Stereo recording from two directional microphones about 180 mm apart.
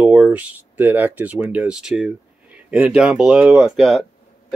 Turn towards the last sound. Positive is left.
turn(degrees=0)  # may be behind; listen again after turning